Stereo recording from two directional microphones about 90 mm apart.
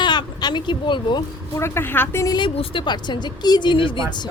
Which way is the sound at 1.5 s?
30° left (ahead or behind).